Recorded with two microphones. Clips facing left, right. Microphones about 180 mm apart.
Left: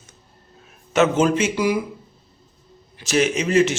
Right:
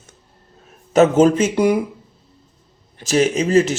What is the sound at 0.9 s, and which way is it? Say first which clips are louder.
Speech: right 5 dB; 35° right (ahead or behind).